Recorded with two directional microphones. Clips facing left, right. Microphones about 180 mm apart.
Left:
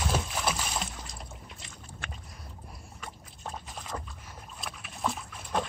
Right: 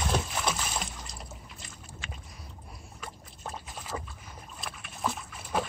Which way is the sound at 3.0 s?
Centre (ahead or behind).